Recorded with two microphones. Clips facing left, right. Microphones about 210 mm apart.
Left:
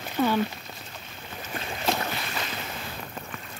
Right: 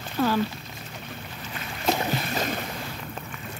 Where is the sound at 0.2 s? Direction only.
15° left (ahead or behind).